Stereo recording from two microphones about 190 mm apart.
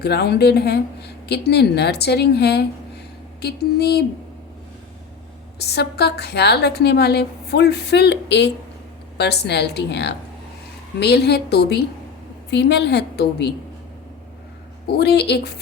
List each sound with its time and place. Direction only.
0.0 s a woman's voice: 60° left (ahead or behind)
5.5 s a woman's voice: 60° left (ahead or behind)
14.8 s a woman's voice: 60° left (ahead or behind)